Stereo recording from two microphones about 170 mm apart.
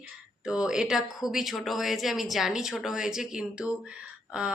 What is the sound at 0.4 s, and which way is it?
Speech, 5° right (ahead or behind).